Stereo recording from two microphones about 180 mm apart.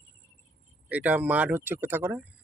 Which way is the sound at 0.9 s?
10° right (ahead or behind).